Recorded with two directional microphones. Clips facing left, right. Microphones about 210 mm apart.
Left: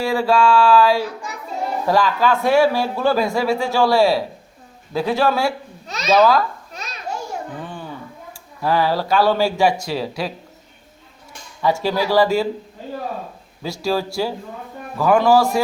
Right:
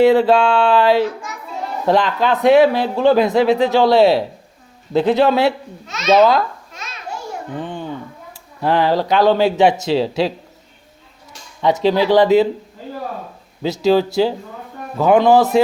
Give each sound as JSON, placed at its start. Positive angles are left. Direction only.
{"t": 0.0, "sound": "speech", "side_deg": -20}
{"t": 5.8, "sound": "babbling", "side_deg": 35}
{"t": 6.1, "sound": "speech", "side_deg": -20}
{"t": 6.7, "sound": "children playing", "side_deg": 35}
{"t": 7.6, "sound": "speech", "side_deg": -20}
{"t": 11.6, "sound": "speech", "side_deg": -20}
{"t": 13.6, "sound": "speech", "side_deg": -20}